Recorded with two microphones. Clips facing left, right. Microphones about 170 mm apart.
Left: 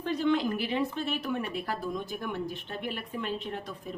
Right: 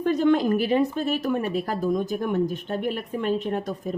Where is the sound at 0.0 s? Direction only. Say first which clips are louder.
Right 7 dB; 50° right (ahead or behind).